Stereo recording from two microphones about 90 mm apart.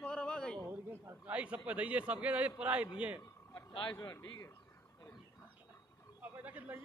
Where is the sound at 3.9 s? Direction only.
30° left (ahead or behind).